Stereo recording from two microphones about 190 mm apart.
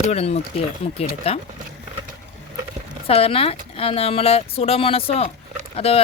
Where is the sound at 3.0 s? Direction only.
30° left (ahead or behind).